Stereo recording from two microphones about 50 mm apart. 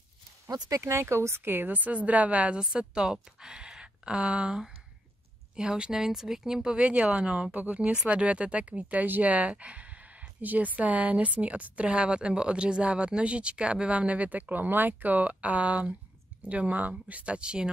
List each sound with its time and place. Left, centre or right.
0.7 s a woman's voice: right; by 17.6 s centre